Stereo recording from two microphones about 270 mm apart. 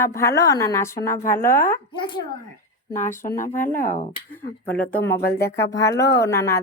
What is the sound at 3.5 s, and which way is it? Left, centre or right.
Speech, left.